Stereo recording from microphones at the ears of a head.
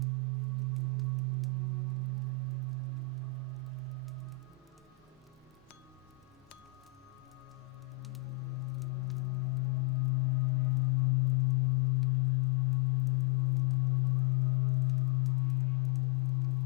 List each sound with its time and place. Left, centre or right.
0.0 s music: right
8.0 s music: left